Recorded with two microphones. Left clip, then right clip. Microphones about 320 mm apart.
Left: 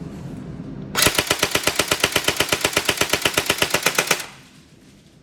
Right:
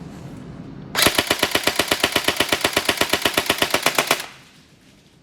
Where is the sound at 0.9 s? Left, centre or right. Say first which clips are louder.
Right 1 dB; right.